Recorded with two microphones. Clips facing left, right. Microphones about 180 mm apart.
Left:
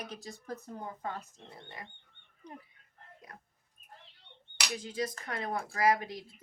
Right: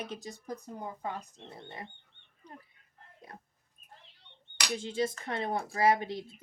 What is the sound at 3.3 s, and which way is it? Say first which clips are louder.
Speech: right 4 dB; 30° right (ahead or behind).